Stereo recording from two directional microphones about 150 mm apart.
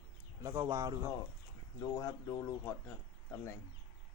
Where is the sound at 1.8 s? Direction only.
25° left (ahead or behind).